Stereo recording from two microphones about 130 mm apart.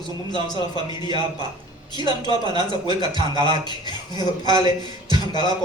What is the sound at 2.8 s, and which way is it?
Speech, 35° left (ahead or behind).